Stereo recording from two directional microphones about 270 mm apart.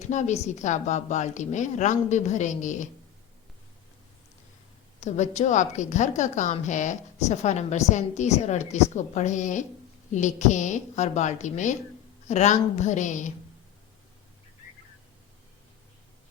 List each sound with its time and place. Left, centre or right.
0.0 s a woman's voice: left
4.9 s a woman's voice: left